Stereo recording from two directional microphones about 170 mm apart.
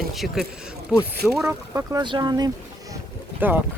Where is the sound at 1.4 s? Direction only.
15° right (ahead or behind).